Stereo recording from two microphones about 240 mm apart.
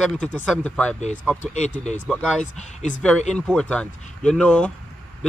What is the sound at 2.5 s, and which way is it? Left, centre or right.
Speech, left.